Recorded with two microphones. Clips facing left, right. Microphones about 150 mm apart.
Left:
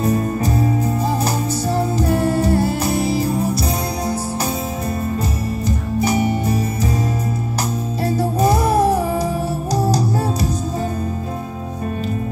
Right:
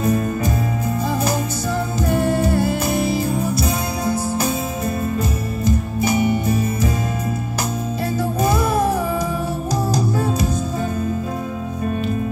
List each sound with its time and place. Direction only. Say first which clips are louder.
0.0 s music: left 1 dB; 35° left (ahead or behind)
2.0 s music: right 2 dB; 35° left (ahead or behind)
5.9 s music: left 2 dB; 35° left (ahead or behind)
8.4 s music: left 3 dB; 35° left (ahead or behind)